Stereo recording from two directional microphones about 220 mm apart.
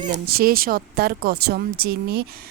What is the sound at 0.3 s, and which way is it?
Speech, 45° right (ahead or behind).